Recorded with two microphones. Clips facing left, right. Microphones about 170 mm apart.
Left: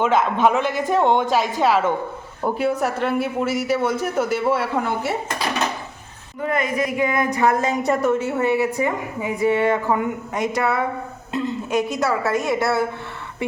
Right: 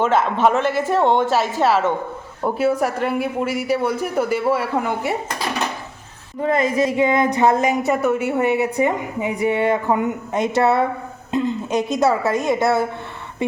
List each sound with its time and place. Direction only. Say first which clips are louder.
0.0 s a man's voice: right 1 dB; centre (ahead or behind)
6.4 s a woman's voice: right 4 dB; 30° right (ahead or behind)
7.8 s a woman's voice: right 1 dB; 5° right (ahead or behind)